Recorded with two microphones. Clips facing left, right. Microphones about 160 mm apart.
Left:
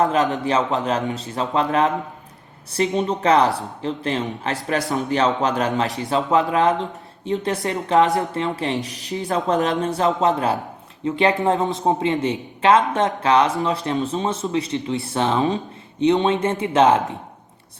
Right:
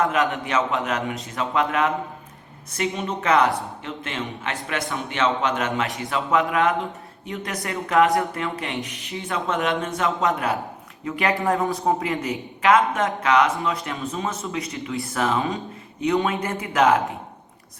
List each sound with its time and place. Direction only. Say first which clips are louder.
0.0 s speech: left 3 dB; 35° left (ahead or behind)